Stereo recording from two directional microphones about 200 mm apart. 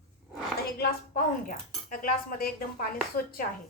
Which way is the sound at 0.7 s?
45° left (ahead or behind).